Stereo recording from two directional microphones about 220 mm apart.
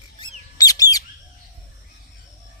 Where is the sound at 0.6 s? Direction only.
15° left (ahead or behind).